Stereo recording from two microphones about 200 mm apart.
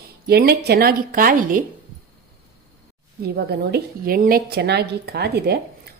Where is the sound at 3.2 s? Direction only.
55° right (ahead or behind).